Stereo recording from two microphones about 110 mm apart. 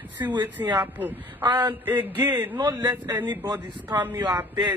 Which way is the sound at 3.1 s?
20° right (ahead or behind).